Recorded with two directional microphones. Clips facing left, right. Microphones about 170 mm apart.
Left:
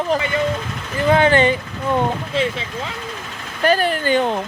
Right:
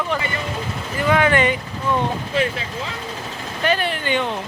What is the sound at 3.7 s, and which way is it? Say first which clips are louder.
Speech: left 4 dB; 40° left (ahead or behind).